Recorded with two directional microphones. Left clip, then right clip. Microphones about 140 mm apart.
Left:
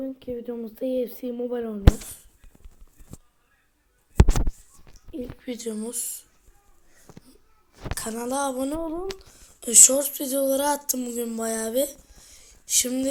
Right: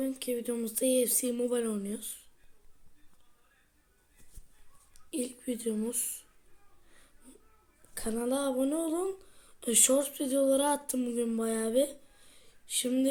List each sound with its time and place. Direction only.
0.0 s speech: 15° right (ahead or behind)
5.1 s speech: 15° right (ahead or behind)
7.9 s speech: 5° left (ahead or behind)